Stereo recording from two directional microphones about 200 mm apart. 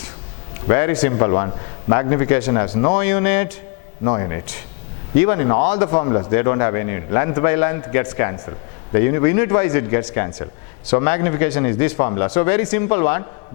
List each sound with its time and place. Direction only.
0.7 s a man's voice: 15° left (ahead or behind)